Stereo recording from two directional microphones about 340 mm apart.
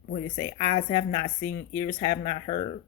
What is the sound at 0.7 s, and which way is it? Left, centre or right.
Speech, centre.